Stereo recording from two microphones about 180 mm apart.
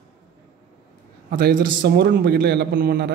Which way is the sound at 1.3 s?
50° right (ahead or behind).